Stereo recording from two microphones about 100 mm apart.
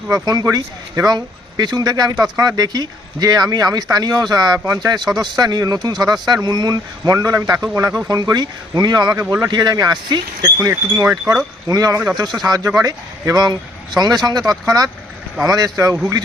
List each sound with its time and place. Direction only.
0.1 s speech: 40° right (ahead or behind)